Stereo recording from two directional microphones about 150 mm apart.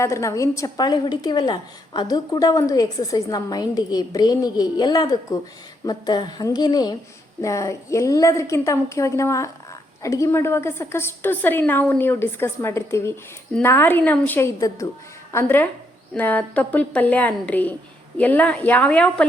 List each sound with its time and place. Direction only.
0.0 s a woman's voice: 20° left (ahead or behind)